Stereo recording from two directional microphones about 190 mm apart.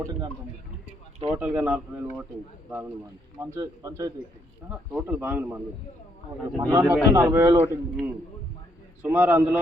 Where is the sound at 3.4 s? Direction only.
15° right (ahead or behind).